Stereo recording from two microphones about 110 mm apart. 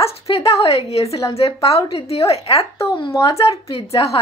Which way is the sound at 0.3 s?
65° left (ahead or behind).